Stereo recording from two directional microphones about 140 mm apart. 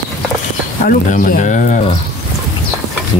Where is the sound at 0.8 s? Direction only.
75° left (ahead or behind).